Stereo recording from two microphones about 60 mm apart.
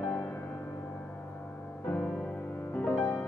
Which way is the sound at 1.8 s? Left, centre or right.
Left.